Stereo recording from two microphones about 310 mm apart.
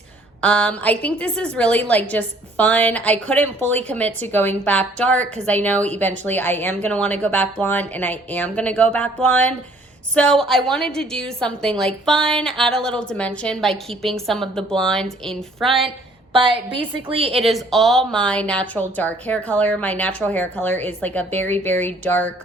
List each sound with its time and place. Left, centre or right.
0.4 s a woman's voice: centre
16.3 s a woman's voice: centre
17.4 s a woman's voice: centre